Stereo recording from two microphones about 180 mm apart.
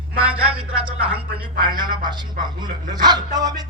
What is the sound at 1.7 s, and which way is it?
Speech, 25° right (ahead or behind).